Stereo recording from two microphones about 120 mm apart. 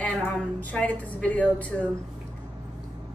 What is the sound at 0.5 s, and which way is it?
A woman's voice, 15° left (ahead or behind).